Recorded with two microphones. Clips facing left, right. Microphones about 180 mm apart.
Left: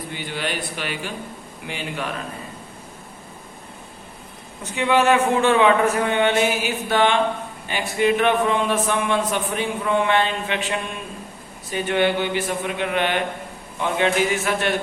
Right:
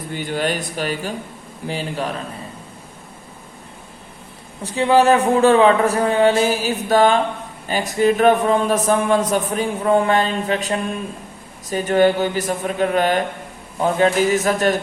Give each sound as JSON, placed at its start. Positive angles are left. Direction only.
{"t": 0.1, "sound": "a man's voice", "side_deg": -45}
{"t": 4.6, "sound": "a man's voice", "side_deg": -35}